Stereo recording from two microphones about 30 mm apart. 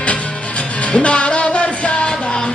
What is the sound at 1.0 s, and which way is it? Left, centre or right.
Music, left.